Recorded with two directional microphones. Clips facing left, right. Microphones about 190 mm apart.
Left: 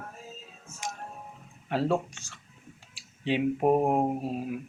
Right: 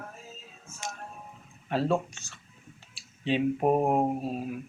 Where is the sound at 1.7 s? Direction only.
15° left (ahead or behind).